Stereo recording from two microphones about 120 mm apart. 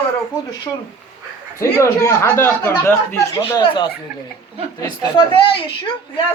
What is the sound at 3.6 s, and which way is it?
Speech, 45° left (ahead or behind).